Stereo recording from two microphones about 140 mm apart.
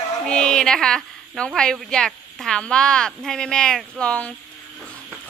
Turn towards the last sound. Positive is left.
turn(degrees=5)  # may be behind; listen again after turning